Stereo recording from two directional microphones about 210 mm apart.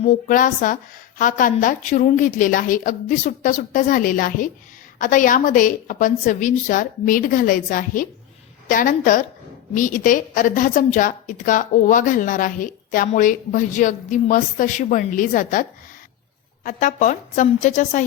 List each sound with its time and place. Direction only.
0.0 s a woman's voice: 40° left (ahead or behind)
16.6 s a woman's voice: 35° left (ahead or behind)